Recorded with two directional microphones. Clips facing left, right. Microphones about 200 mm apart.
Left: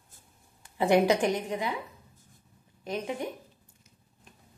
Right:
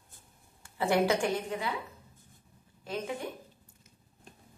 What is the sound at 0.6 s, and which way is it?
A woman's voice, 20° left (ahead or behind).